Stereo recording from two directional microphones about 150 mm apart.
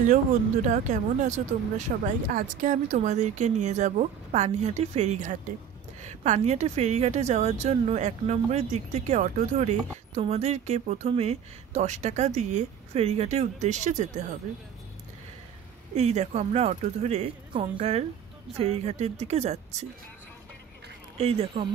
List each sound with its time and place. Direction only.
0.7 s a woman's voice: 55° right (ahead or behind)
16.0 s a woman's voice: 45° right (ahead or behind)
17.5 s a woman's voice: 35° right (ahead or behind)
21.2 s a woman's voice: 40° right (ahead or behind)